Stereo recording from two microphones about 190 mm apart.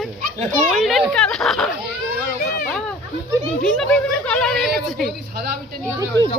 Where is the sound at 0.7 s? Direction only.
Centre (ahead or behind).